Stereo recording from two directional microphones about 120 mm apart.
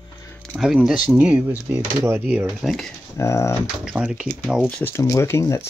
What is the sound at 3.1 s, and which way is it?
Speech, 25° left (ahead or behind).